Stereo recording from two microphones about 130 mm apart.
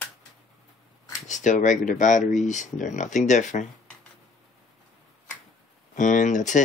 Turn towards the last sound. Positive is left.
turn(degrees=70)  # may be behind; listen again after turning